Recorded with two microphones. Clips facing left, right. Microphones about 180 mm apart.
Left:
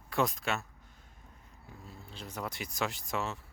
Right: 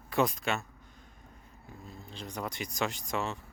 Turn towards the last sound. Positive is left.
turn(degrees=5)  # may be behind; listen again after turning